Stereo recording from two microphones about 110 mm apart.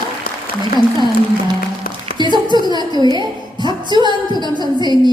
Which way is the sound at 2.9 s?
40° left (ahead or behind).